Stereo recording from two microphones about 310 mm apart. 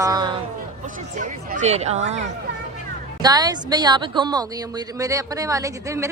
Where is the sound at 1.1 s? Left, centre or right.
Right.